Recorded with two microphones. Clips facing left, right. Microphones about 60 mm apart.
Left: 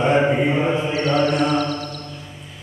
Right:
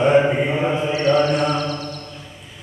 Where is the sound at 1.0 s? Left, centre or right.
Right.